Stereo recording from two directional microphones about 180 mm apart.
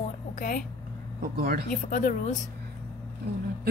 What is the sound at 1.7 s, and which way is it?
Speech, 50° left (ahead or behind).